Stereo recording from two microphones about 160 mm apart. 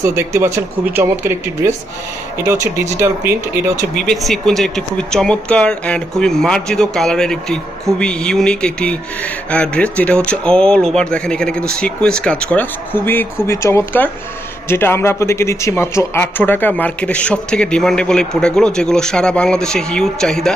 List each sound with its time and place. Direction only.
0.0 s speech: 15° right (ahead or behind)
3.0 s speech: 15° right (ahead or behind)
3.9 s speech: centre (ahead or behind)